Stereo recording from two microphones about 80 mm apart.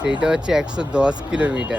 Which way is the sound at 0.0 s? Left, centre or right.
Centre.